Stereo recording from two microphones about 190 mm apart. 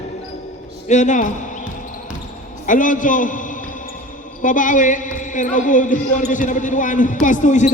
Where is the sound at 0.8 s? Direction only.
40° left (ahead or behind).